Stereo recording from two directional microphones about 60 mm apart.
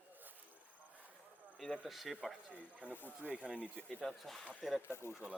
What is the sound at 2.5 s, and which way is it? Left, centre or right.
Speech, left.